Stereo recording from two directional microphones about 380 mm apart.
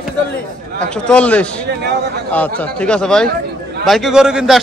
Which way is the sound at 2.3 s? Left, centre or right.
Centre.